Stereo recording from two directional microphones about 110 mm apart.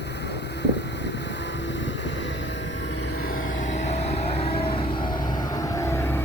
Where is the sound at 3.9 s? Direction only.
70° left (ahead or behind).